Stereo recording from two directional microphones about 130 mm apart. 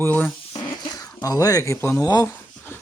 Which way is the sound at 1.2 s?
25° left (ahead or behind).